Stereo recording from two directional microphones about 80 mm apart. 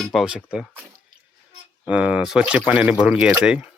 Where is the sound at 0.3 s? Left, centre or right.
Centre.